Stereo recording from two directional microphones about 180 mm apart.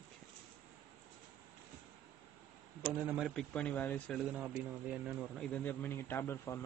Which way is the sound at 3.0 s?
Centre (ahead or behind).